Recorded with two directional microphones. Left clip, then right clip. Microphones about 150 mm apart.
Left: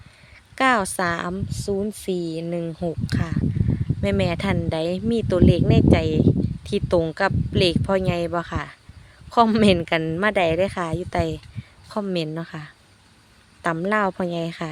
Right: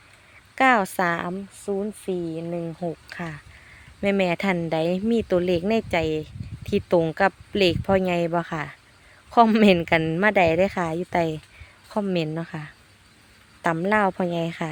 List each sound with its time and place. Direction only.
0.5 s a sound: 5° left (ahead or behind)
0.9 s speech: 5° left (ahead or behind)
1.7 s speech: 40° left (ahead or behind)
3.1 s speech: 5° left (ahead or behind)